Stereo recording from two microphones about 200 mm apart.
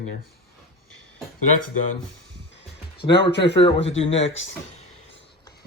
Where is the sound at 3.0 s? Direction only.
30° left (ahead or behind).